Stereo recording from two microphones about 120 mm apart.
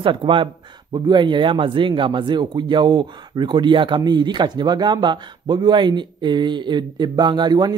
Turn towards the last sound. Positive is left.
turn(degrees=-35)  # may be behind; listen again after turning